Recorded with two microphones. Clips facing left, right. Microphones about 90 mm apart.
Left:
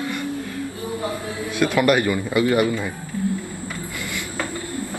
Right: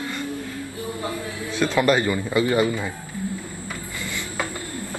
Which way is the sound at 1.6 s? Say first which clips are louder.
Left 1 dB; 10° left (ahead or behind).